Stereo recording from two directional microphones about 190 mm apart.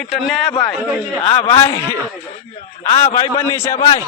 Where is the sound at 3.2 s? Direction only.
15° left (ahead or behind).